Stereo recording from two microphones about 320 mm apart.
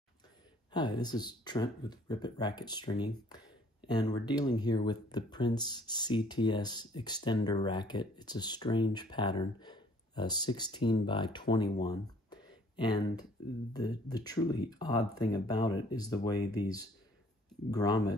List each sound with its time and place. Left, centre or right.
0.7 s speech: centre
11.8 s a sound: centre
13.7 s speech: centre